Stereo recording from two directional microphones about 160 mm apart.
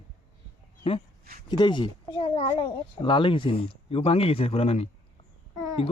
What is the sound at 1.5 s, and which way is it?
A child's voice, 30° left (ahead or behind).